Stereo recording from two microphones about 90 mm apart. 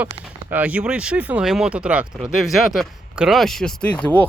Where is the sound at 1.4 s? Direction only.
5° right (ahead or behind).